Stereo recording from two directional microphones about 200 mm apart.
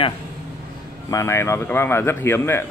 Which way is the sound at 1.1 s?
15° left (ahead or behind).